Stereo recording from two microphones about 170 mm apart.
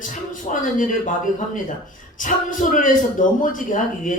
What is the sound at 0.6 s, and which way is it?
Speech, 50° left (ahead or behind).